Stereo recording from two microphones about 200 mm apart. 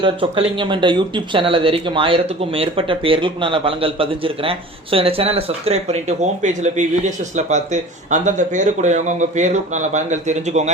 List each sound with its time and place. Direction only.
0.0 s speech: 25° right (ahead or behind)